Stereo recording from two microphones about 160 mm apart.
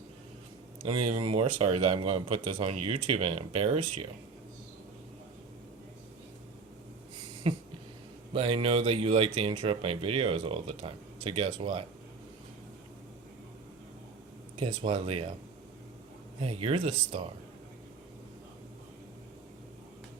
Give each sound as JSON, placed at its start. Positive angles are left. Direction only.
{"t": 0.8, "sound": "speech", "side_deg": -35}
{"t": 7.4, "sound": "a sound", "side_deg": -35}
{"t": 8.3, "sound": "speech", "side_deg": -35}
{"t": 14.5, "sound": "speech", "side_deg": -35}
{"t": 16.4, "sound": "speech", "side_deg": -35}